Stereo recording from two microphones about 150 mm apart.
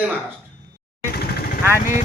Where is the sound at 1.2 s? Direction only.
90° left.